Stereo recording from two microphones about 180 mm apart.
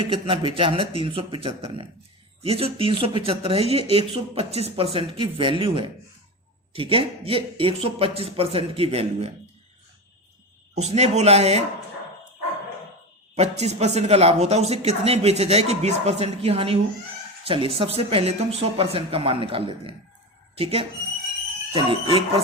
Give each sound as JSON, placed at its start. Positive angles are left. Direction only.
{"t": 0.0, "sound": "a man's voice", "side_deg": -30}
{"t": 10.8, "sound": "speech", "side_deg": -35}
{"t": 13.3, "sound": "a man's voice", "side_deg": -35}